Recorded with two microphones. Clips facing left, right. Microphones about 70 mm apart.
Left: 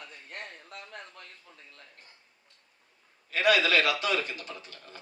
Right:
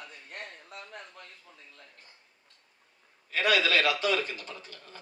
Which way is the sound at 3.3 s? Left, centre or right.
Left.